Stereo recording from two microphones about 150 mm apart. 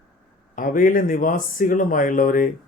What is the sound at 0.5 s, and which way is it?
Speech, 65° left (ahead or behind).